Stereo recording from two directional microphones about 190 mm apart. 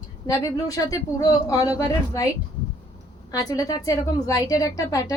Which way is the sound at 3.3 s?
20° left (ahead or behind).